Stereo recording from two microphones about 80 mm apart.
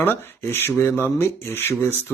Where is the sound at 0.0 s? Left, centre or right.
Left.